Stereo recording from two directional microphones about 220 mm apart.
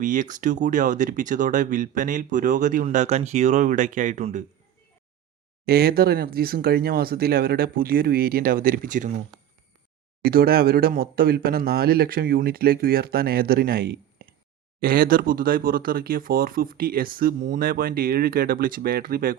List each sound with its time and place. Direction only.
0.0 s speech: 35° right (ahead or behind)
5.6 s speech: 45° right (ahead or behind)
10.2 s speech: 45° right (ahead or behind)